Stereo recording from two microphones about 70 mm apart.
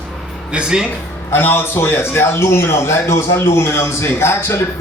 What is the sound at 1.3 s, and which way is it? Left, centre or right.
A man's voice, left.